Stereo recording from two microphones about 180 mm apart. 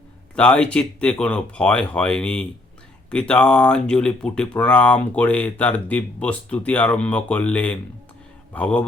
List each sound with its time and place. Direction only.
0.3 s speech: 5° left (ahead or behind)